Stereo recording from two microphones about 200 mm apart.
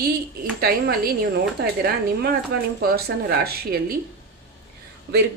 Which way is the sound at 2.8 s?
50° right (ahead or behind).